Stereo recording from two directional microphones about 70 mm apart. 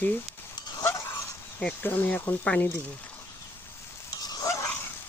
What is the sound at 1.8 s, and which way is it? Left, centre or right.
Speech, left.